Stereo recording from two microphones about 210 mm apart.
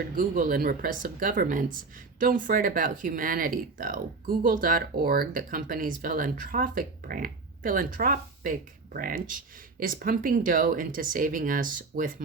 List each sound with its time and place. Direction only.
0.2 s speech: 40° right (ahead or behind)